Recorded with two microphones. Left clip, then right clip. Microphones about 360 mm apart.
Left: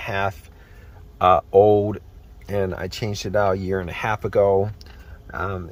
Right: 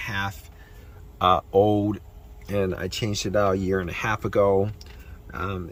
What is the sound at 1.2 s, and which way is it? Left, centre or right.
Speech, left.